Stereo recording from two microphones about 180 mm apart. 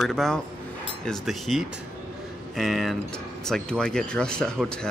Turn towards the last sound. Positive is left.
turn(degrees=5)  # may be behind; listen again after turning